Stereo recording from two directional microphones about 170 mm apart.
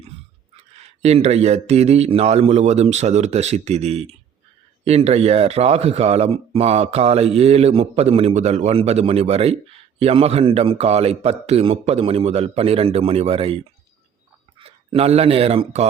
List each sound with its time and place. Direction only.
1.0 s a man's voice: 40° right (ahead or behind)
14.6 s speech: 35° right (ahead or behind)